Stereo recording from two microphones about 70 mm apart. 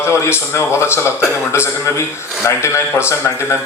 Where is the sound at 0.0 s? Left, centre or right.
Left.